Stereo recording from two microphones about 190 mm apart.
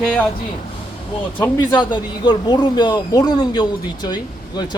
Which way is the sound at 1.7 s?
25° left (ahead or behind).